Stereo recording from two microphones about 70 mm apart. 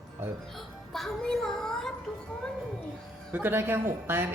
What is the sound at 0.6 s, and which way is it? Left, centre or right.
A child's voice, centre.